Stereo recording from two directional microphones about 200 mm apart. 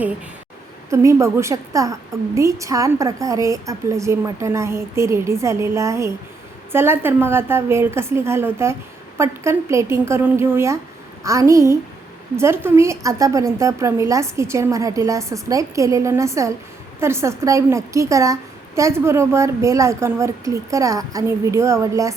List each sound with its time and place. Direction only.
0.9 s a woman's voice: 15° right (ahead or behind)